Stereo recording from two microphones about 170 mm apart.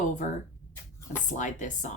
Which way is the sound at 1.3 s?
45° left (ahead or behind).